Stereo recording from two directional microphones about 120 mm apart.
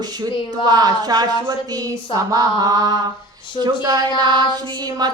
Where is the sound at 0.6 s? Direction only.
35° right (ahead or behind).